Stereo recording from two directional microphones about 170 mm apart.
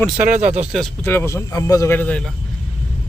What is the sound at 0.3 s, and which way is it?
Speech, 45° right (ahead or behind).